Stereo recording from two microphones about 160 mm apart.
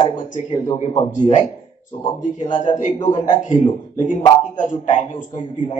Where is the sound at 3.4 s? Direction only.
50° left (ahead or behind).